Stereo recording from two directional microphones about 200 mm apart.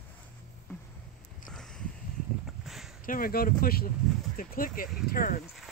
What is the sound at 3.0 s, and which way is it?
Speech, 45° left (ahead or behind).